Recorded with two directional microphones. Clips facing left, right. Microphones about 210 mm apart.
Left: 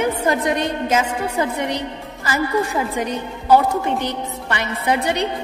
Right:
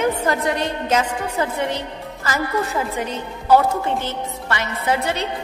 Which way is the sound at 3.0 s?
15° left (ahead or behind).